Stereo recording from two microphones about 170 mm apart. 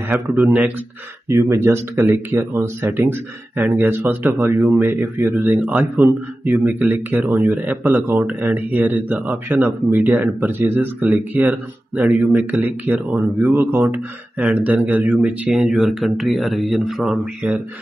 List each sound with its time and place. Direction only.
0.1 s speech: 5° right (ahead or behind)
6.0 s speech: 10° right (ahead or behind)